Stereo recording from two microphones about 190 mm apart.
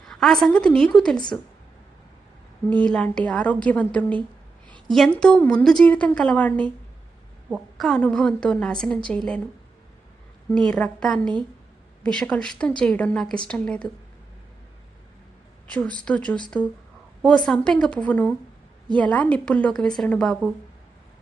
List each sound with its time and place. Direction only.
0.0 s a woman's voice: centre (ahead or behind)
1.1 s a woman's voice: 25° left (ahead or behind)
2.6 s a woman's voice: 5° left (ahead or behind)
10.5 s a woman's voice: 5° left (ahead or behind)
15.6 s a woman's voice: 5° left (ahead or behind)